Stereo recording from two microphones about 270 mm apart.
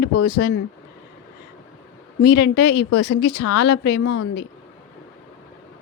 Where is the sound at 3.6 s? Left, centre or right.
Left.